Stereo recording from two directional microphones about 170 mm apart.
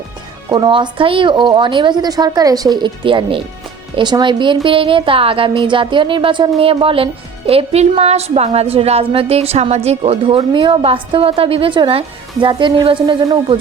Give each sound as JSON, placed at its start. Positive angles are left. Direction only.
{"t": 0.5, "sound": "a woman's voice", "side_deg": -25}